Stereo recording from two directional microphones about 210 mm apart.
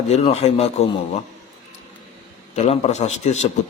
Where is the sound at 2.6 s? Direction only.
30° left (ahead or behind).